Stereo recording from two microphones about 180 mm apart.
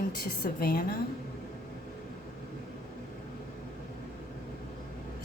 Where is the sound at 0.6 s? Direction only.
55° left (ahead or behind).